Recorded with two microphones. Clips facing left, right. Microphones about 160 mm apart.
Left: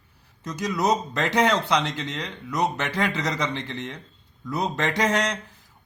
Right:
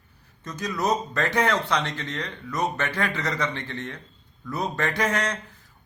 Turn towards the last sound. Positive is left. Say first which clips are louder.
# left 2 dB
turn(degrees=15)  # may be behind; listen again after turning